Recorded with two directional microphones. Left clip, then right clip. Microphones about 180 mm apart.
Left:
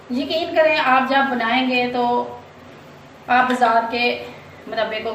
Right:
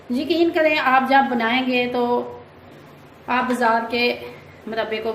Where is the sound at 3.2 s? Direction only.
40° right (ahead or behind).